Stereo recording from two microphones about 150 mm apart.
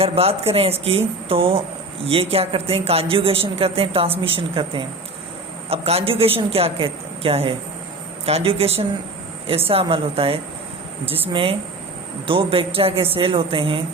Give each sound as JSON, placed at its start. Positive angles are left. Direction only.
{"t": 0.0, "sound": "speech", "side_deg": -40}